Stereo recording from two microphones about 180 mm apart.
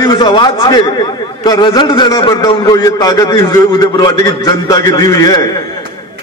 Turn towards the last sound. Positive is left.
turn(degrees=20)  # may be behind; listen again after turning